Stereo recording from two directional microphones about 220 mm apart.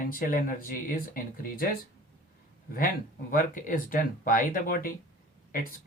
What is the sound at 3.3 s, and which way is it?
Speech, 40° left (ahead or behind).